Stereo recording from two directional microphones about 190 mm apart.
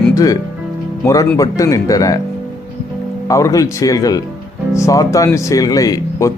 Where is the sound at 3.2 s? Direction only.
15° left (ahead or behind).